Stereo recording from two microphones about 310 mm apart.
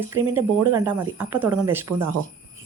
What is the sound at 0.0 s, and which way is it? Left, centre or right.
Speech, centre.